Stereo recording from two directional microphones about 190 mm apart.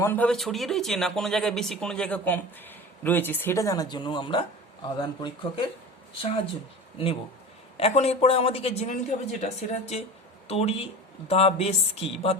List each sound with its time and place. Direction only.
0.0 s speech: 10° left (ahead or behind)
7.8 s speech: 30° left (ahead or behind)